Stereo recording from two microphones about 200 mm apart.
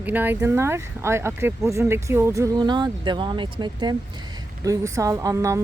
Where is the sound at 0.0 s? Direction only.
10° right (ahead or behind).